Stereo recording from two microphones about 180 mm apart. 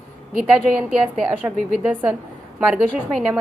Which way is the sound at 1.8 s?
10° right (ahead or behind).